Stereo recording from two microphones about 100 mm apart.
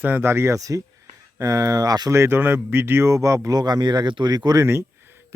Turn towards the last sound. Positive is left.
turn(degrees=-25)  # may be behind; listen again after turning